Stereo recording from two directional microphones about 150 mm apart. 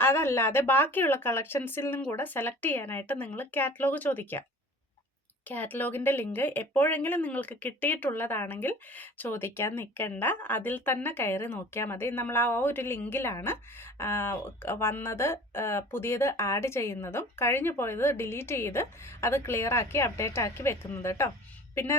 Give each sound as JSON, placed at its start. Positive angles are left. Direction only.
{"t": 0.0, "sound": "speech", "side_deg": 15}
{"t": 5.5, "sound": "speech", "side_deg": 10}